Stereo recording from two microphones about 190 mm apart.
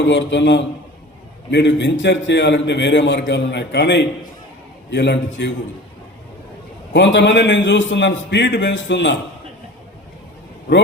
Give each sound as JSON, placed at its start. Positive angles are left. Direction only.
{"t": 0.0, "sound": "a man's voice", "side_deg": 70}
{"t": 6.9, "sound": "a man's voice", "side_deg": 70}